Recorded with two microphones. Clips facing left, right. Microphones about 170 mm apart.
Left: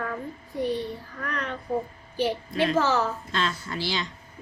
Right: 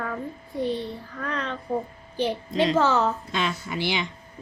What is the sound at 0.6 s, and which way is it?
A child's voice, 20° right (ahead or behind).